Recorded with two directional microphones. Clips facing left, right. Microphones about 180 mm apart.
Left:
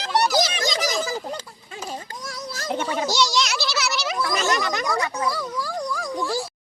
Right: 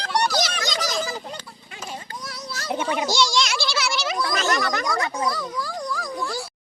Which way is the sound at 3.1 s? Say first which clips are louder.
Even; 10° left (ahead or behind).